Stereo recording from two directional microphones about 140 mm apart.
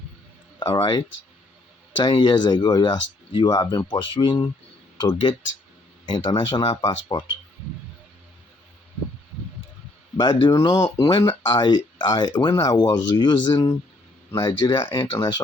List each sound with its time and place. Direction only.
0.6 s speech: 35° left (ahead or behind)
10.2 s speech: 30° left (ahead or behind)
13.5 s speech: 20° left (ahead or behind)
14.3 s speech: 30° left (ahead or behind)